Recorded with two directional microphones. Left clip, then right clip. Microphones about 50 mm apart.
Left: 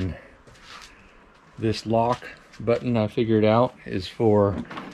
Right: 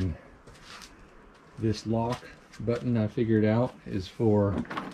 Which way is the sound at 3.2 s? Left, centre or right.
Right.